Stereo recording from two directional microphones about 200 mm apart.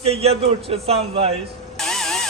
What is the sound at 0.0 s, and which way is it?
A man's voice, 30° right (ahead or behind).